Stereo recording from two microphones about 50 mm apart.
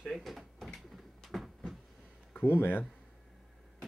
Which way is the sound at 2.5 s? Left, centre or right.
Left.